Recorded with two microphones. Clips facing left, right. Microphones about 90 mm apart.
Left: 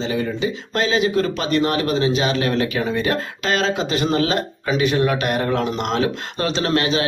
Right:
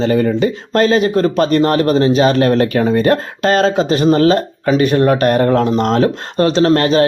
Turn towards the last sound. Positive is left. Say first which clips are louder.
# right 8 dB
turn(degrees=-45)  # may be behind; listen again after turning